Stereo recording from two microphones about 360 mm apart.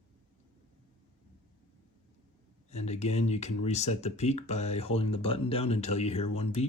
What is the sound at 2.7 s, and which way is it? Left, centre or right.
Speech, centre.